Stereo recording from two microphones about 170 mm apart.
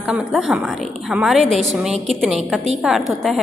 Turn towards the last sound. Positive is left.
turn(degrees=0)  # may be behind; listen again after turning